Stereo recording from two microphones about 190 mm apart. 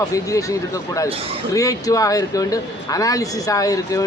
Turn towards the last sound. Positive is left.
turn(degrees=20)  # may be behind; listen again after turning